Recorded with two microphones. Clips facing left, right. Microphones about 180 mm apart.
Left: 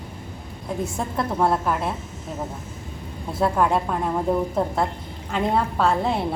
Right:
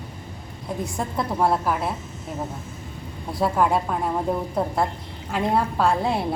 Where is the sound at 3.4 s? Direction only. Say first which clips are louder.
Even; 5° right (ahead or behind).